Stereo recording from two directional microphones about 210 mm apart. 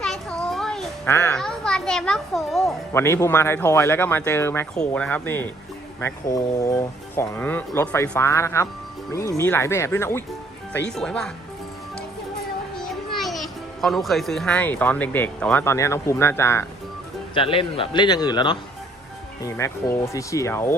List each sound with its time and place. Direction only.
0.0 s a sound: centre (ahead or behind)
1.4 s a child's voice: 5° left (ahead or behind)
2.9 s speech: 10° left (ahead or behind)
12.7 s a child's voice: centre (ahead or behind)
17.3 s a man's voice: 25° left (ahead or behind)